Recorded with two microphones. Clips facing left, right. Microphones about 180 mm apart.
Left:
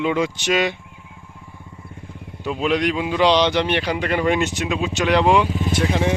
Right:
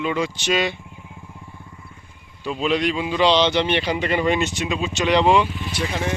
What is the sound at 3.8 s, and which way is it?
Speech, centre (ahead or behind).